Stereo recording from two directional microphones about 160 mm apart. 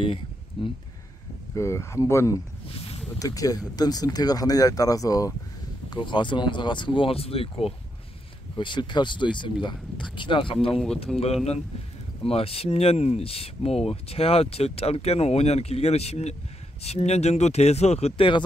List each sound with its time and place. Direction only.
0.6 s speech: 35° left (ahead or behind)
1.5 s speech: 20° left (ahead or behind)
2.7 s a sound: 35° left (ahead or behind)
3.2 s speech: 20° left (ahead or behind)
11.1 s speech: centre (ahead or behind)
12.3 s speech: 40° left (ahead or behind)